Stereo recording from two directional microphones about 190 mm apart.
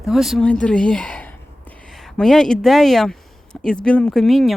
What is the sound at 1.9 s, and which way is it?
Speech, centre (ahead or behind).